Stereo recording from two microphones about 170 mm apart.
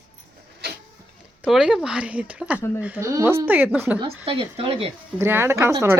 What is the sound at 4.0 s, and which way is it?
Speech, 35° right (ahead or behind).